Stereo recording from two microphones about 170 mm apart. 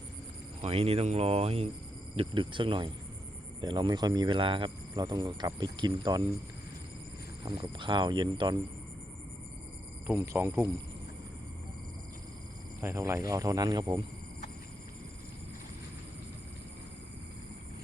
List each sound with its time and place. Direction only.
0.6 s speech: 35° right (ahead or behind)
7.4 s speech: 30° right (ahead or behind)
10.2 s speech: 15° right (ahead or behind)
12.8 s speech: 15° right (ahead or behind)